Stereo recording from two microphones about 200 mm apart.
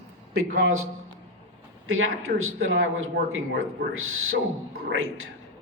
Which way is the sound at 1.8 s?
90° right.